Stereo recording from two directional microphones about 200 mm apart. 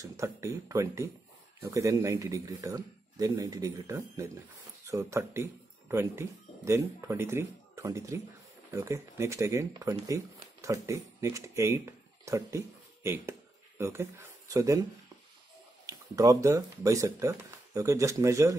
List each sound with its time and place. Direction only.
0.0 s speech: 15° right (ahead or behind)
15.9 s speech: 15° right (ahead or behind)